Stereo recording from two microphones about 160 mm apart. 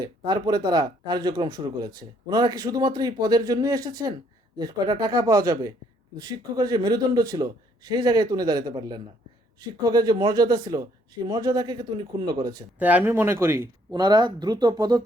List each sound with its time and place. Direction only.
0.0 s a man's voice: 25° right (ahead or behind)
12.8 s a man's voice: 10° right (ahead or behind); by 15.0 s 25° right (ahead or behind)